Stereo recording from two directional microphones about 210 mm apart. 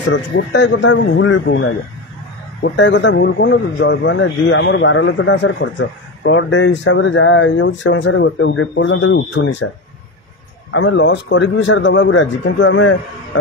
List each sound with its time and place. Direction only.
0.1 s a man's voice: 60° left (ahead or behind)
2.6 s a man's voice: 60° left (ahead or behind)
10.7 s a man's voice: 65° left (ahead or behind)